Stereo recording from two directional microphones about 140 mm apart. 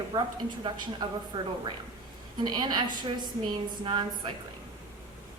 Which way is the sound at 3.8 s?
35° right (ahead or behind).